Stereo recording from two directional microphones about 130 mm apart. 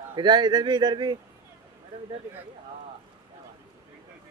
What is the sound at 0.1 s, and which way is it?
Speech, 35° right (ahead or behind).